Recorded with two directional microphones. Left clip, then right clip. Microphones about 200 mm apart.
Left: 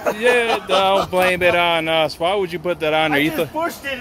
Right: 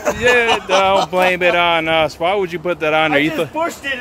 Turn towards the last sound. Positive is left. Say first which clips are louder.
# right 3 dB
turn(degrees=-40)  # may be behind; listen again after turning